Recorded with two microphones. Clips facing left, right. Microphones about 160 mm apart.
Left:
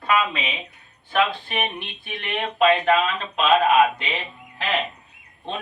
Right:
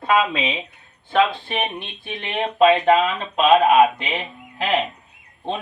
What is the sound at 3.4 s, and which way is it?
Speech, 20° right (ahead or behind).